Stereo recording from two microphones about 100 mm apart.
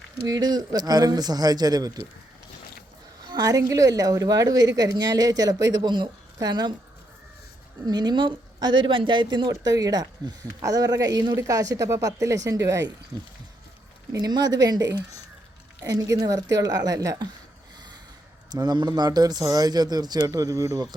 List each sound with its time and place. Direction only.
0.2 s speech: 40° right (ahead or behind)
3.2 s a sound: 40° right (ahead or behind)
3.6 s speech: 35° right (ahead or behind)
7.9 s speech: 45° right (ahead or behind)
13.1 s speech: 45° right (ahead or behind)
18.4 s speech: 45° right (ahead or behind)